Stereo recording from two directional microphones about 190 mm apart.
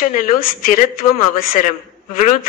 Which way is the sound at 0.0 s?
45° left (ahead or behind).